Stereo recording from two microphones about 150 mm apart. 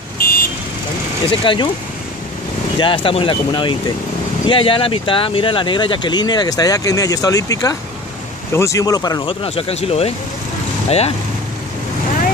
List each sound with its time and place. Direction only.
0.2 s vehicle: 80° left
1.4 s speech: 35° left (ahead or behind)
2.8 s speech: 35° left (ahead or behind)
9.3 s speech: 40° left (ahead or behind)